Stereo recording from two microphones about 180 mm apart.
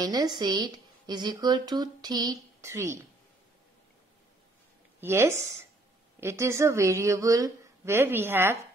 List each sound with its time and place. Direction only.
0.0 s a woman's voice: 20° right (ahead or behind)
5.0 s a woman's voice: 15° right (ahead or behind)